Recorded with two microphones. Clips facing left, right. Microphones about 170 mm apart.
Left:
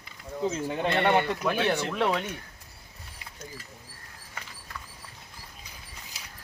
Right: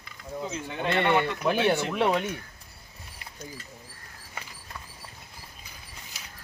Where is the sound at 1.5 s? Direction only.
20° right (ahead or behind).